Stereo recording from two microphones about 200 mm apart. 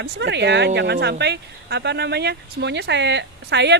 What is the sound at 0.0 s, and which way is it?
Speech, 60° right (ahead or behind).